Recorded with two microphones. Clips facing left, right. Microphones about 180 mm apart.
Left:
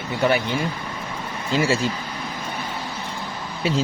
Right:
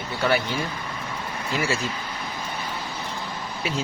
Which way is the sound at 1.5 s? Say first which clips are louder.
Left 5 dB; 25° left (ahead or behind).